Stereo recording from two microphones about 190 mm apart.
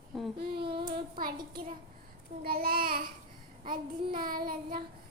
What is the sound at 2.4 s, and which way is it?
Child singing, 50° right (ahead or behind).